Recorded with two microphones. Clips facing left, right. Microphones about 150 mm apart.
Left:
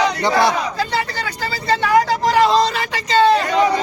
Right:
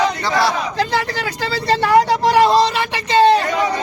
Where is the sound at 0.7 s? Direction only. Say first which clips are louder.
Right 2 dB; 90° right.